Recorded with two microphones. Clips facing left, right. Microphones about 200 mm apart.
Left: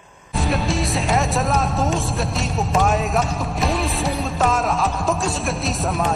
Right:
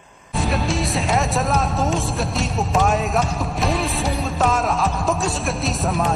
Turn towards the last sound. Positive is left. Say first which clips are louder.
# even
turn(degrees=0)  # may be behind; listen again after turning